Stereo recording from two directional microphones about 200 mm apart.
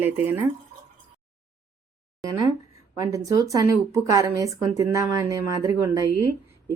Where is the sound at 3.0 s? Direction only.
15° right (ahead or behind).